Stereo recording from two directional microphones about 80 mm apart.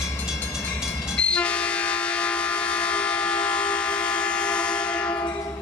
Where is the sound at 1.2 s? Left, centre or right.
Centre.